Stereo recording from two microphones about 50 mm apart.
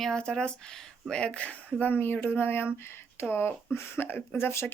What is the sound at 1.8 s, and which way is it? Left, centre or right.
Speech, left.